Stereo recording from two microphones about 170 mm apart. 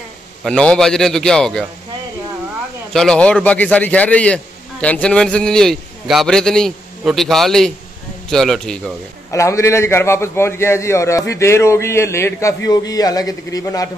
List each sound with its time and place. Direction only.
0.4 s a man's voice: 5° left (ahead or behind)
2.9 s a man's voice: 5° left (ahead or behind)
9.3 s a man's voice: 15° left (ahead or behind)